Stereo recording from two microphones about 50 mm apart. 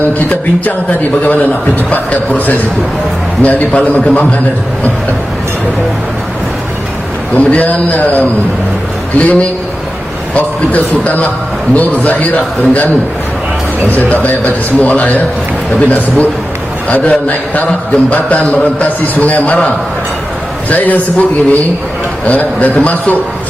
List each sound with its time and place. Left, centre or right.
0.2 s a man's voice: left
7.3 s a man's voice: left
13.9 s a man's voice: left
16.9 s a man's voice: left
20.7 s a man's voice: left